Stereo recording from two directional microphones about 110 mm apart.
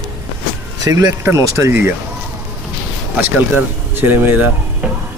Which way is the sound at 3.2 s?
20° right (ahead or behind).